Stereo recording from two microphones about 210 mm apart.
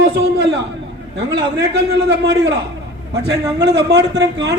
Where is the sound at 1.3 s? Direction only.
55° right (ahead or behind).